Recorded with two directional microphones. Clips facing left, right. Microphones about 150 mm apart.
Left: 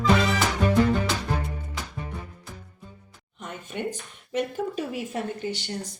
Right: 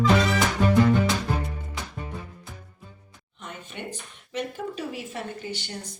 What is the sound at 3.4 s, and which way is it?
A woman's voice, 45° left (ahead or behind).